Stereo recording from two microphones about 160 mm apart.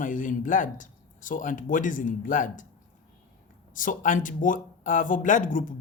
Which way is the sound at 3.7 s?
55° left (ahead or behind).